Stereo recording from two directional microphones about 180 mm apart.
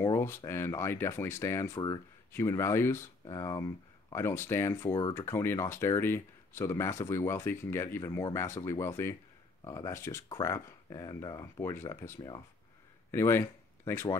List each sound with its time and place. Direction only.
0.0 s speech: 15° left (ahead or behind)